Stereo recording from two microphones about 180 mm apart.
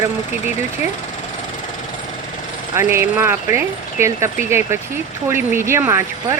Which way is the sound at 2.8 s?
15° right (ahead or behind).